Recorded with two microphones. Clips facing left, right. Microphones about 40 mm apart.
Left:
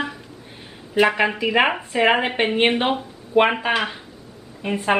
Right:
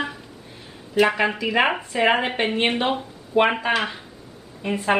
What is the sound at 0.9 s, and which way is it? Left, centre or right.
Speech, centre.